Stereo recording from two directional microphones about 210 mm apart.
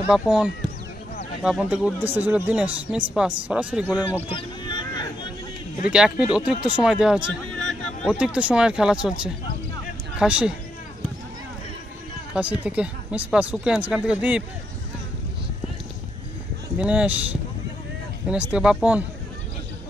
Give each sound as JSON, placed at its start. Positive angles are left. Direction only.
{"t": 0.0, "sound": "speech", "side_deg": -5}
{"t": 4.3, "sound": "a sound", "side_deg": 25}
{"t": 5.9, "sound": "speech", "side_deg": -5}
{"t": 12.4, "sound": "speech", "side_deg": -5}
{"t": 16.7, "sound": "speech", "side_deg": -5}